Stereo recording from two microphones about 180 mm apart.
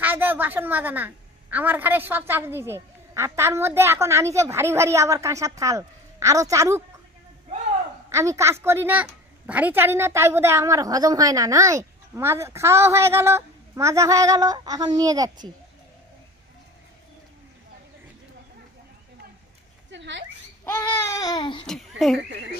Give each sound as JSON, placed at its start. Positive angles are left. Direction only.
{"t": 0.0, "sound": "a woman's voice", "side_deg": -10}
{"t": 8.1, "sound": "a woman's voice", "side_deg": -15}
{"t": 19.9, "sound": "a sound", "side_deg": -85}
{"t": 20.6, "sound": "babbling", "side_deg": 15}
{"t": 21.6, "sound": "a child's voice", "side_deg": 0}
{"t": 22.3, "sound": "speech", "side_deg": -75}